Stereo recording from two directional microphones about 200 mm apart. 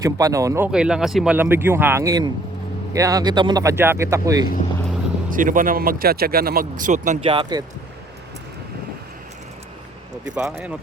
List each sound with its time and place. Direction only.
0.0 s speech: 15° right (ahead or behind)
0.7 s speech: 5° right (ahead or behind)
5.3 s speech: 40° right (ahead or behind)
7.3 s speech: 25° right (ahead or behind)
10.2 s speech: 5° right (ahead or behind)